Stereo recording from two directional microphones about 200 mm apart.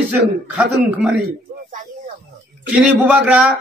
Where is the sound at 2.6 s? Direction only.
5° right (ahead or behind).